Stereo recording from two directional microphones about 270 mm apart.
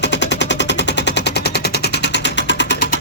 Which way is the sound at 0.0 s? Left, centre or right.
Left.